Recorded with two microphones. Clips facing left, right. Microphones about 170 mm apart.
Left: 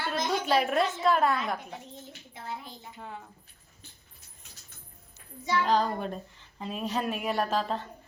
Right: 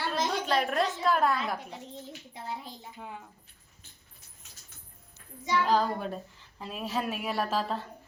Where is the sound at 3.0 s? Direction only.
10° right (ahead or behind).